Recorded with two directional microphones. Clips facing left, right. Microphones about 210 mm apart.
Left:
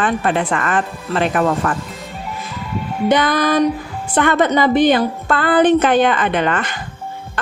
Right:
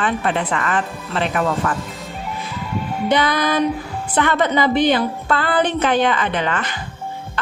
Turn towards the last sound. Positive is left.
turn(degrees=50)  # may be behind; listen again after turning